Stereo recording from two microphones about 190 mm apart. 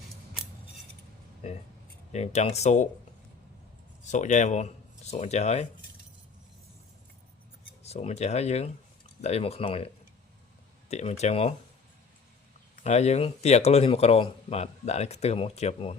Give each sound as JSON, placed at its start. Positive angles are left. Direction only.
{"t": 1.4, "sound": "speech", "side_deg": 30}
{"t": 4.1, "sound": "speech", "side_deg": 40}
{"t": 7.9, "sound": "speech", "side_deg": 35}
{"t": 12.8, "sound": "speech", "side_deg": 35}